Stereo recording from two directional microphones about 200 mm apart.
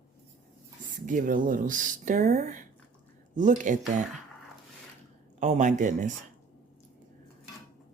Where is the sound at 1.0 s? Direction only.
40° right (ahead or behind).